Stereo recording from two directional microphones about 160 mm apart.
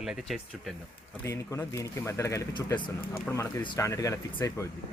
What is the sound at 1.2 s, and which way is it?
Speech, 20° left (ahead or behind).